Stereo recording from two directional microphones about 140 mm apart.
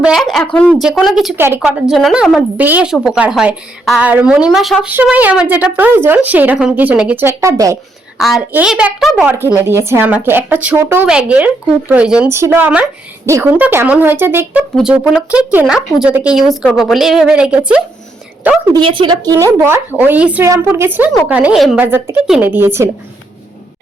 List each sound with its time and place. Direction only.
0.0 s a woman's voice: centre (ahead or behind)
1.4 s a woman's voice: 15° right (ahead or behind)
2.6 s a woman's voice: 10° right (ahead or behind)
8.2 s a woman's voice: centre (ahead or behind)
9.2 s speech: 15° right (ahead or behind)
12.3 s speech: 15° right (ahead or behind)
14.8 s a woman's voice: centre (ahead or behind)
18.7 s a woman's voice: 35° right (ahead or behind); by 22.9 s 15° right (ahead or behind)